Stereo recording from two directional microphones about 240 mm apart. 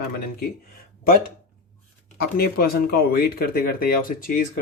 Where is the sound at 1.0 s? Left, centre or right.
Left.